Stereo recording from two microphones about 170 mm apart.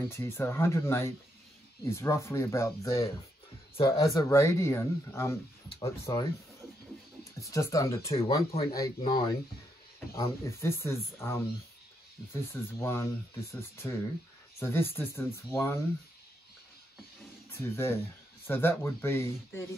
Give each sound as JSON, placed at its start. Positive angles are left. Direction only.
{"t": 0.1, "sound": "speech", "side_deg": 15}
{"t": 7.4, "sound": "speech", "side_deg": 20}
{"t": 10.4, "sound": "speech", "side_deg": 15}
{"t": 17.5, "sound": "speech", "side_deg": 15}